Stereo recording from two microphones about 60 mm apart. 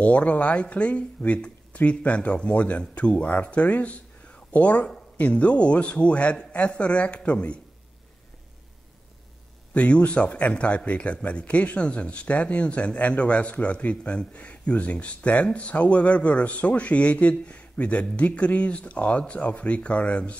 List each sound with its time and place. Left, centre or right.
0.0 s speech: left
9.8 s speech: left